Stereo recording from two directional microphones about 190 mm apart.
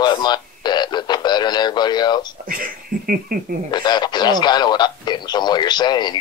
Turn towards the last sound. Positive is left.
turn(degrees=25)  # may be behind; listen again after turning